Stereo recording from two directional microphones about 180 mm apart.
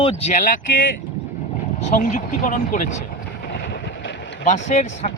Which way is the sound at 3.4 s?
65° left (ahead or behind).